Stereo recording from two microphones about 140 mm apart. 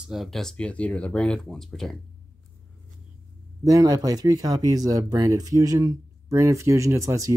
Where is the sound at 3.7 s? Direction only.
25° right (ahead or behind).